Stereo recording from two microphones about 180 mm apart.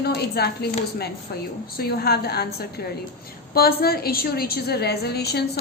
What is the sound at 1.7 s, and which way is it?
A woman's voice, 60° left (ahead or behind).